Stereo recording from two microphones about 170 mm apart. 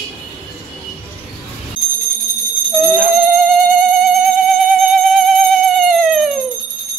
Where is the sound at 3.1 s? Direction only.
Centre (ahead or behind).